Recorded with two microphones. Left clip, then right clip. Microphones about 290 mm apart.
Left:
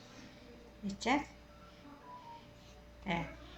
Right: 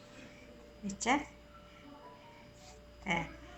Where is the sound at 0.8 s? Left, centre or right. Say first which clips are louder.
Right 2 dB; centre.